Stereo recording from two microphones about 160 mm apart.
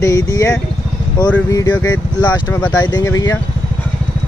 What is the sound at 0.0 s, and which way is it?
Speech, 20° left (ahead or behind).